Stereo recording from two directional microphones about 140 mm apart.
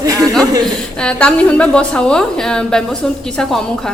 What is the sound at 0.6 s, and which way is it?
A woman's voice, 5° left (ahead or behind).